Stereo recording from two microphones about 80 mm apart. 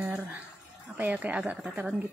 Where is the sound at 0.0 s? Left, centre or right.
Right.